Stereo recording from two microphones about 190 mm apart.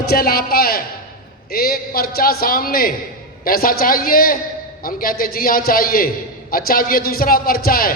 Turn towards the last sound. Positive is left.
turn(degrees=50)  # may be behind; listen again after turning